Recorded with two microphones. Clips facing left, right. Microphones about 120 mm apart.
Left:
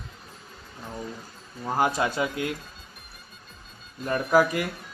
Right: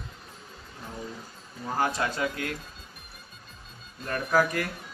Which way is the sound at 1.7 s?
15° left (ahead or behind).